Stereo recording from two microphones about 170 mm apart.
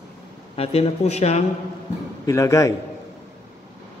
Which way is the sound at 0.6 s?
35° left (ahead or behind).